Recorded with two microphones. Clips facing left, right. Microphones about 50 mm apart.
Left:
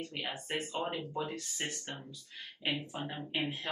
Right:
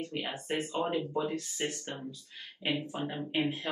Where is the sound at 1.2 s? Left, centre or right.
Right.